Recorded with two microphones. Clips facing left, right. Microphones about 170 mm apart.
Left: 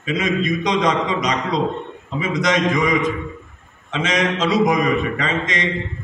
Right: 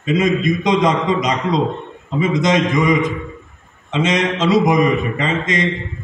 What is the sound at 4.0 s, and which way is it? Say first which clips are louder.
Speech: right 3 dB; 25° right (ahead or behind).